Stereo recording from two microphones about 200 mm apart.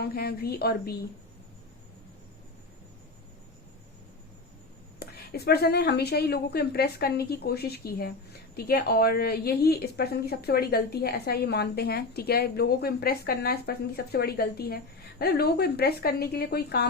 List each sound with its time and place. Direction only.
0.0 s a woman's voice: 50° left (ahead or behind)
4.9 s a woman's voice: 50° left (ahead or behind)